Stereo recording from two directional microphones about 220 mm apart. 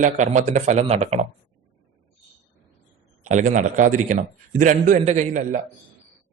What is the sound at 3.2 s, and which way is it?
A man's voice, 35° right (ahead or behind).